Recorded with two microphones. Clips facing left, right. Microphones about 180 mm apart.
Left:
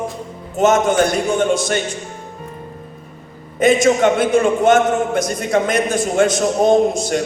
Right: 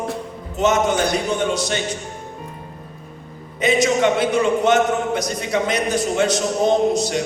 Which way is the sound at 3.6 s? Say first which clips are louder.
Left 4 dB; 50° left (ahead or behind).